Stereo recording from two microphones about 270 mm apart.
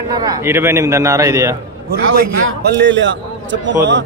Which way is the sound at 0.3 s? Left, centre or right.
Centre.